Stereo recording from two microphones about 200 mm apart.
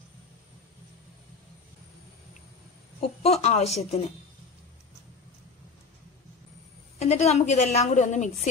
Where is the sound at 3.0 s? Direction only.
30° left (ahead or behind).